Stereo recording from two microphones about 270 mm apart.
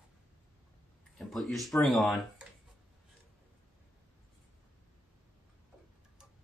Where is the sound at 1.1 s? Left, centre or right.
Centre.